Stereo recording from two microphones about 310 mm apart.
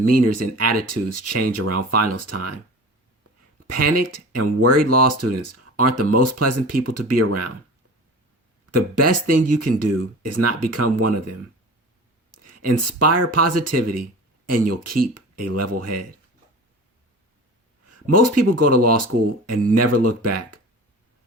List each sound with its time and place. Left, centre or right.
0.1 s speech: right
3.7 s speech: right
8.7 s speech: right
18.1 s speech: right